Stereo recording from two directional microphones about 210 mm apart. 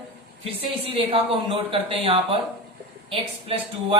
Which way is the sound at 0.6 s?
25° right (ahead or behind).